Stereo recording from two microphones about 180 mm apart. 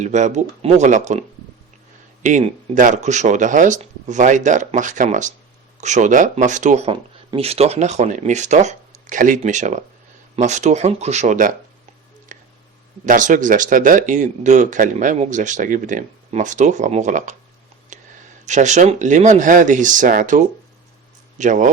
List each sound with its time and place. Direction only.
0.0 s speech: 40° right (ahead or behind)
2.2 s speech: 45° right (ahead or behind)
12.3 s a sound: 45° right (ahead or behind)
13.1 s speech: 45° right (ahead or behind)
17.9 s a sound: 45° right (ahead or behind)
18.4 s speech: 40° right (ahead or behind)